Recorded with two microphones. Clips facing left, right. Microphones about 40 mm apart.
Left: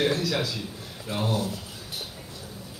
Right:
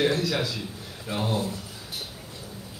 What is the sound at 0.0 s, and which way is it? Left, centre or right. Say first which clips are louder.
Speech: right 1 dB; centre.